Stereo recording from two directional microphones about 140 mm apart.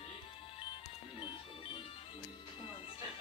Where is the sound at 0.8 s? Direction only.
35° left (ahead or behind).